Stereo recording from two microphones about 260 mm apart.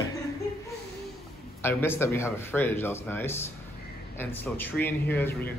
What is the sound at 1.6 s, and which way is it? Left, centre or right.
A man's voice, centre.